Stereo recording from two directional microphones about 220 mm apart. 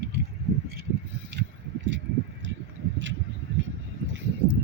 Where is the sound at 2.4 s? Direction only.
55° right (ahead or behind).